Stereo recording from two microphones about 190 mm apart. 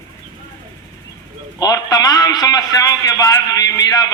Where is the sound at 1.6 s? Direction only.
20° left (ahead or behind).